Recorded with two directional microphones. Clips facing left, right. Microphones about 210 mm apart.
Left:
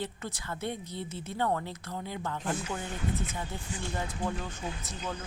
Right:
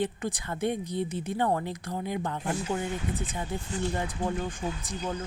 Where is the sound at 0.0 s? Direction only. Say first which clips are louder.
Right 7 dB; 15° right (ahead or behind).